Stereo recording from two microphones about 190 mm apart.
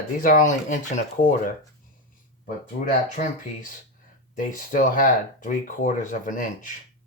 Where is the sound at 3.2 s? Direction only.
45° left (ahead or behind).